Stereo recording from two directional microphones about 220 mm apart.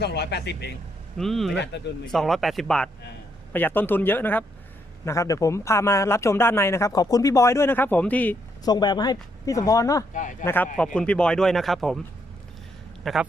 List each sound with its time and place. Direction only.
0.0 s speech: 50° left (ahead or behind)
1.2 s speech: centre (ahead or behind)
1.5 s speech: 50° left (ahead or behind)
2.1 s speech: centre (ahead or behind)
13.0 s speech: centre (ahead or behind)